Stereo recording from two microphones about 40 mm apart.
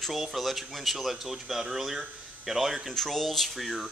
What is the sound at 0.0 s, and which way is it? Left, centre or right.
Speech, centre.